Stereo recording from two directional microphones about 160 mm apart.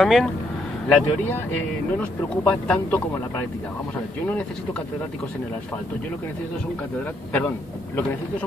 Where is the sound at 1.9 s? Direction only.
10° left (ahead or behind).